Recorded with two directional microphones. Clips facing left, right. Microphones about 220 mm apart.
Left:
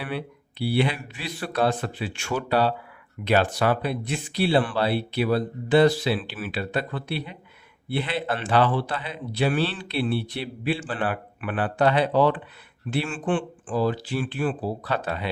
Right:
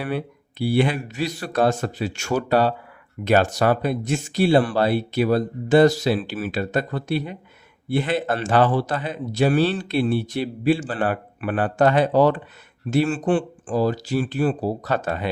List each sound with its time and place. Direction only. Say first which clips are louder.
0.0 s a man's voice: right 5 dB; 45° right (ahead or behind)